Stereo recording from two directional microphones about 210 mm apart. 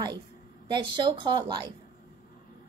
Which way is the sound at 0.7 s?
20° right (ahead or behind).